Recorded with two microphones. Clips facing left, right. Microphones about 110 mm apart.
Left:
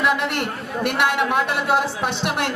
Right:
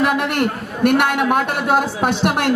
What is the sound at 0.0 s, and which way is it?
Speech, 50° right (ahead or behind).